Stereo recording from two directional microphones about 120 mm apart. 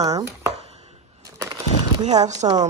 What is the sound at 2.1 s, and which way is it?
Speech, 30° right (ahead or behind).